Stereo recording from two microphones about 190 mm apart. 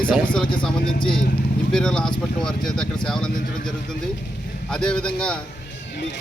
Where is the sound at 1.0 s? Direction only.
25° left (ahead or behind).